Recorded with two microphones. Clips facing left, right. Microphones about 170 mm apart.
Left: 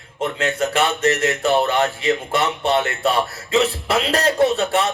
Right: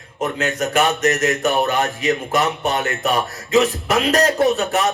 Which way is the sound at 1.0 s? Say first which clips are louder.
Right 1 dB; 30° left (ahead or behind).